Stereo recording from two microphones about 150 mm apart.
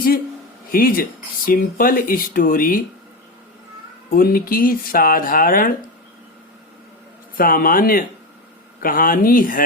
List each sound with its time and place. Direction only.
0.7 s speech: 75° left (ahead or behind)
4.1 s speech: 75° left (ahead or behind)
7.3 s speech: 70° left (ahead or behind)